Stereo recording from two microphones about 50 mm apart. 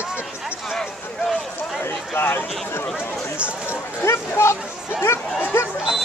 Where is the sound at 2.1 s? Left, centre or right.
Left.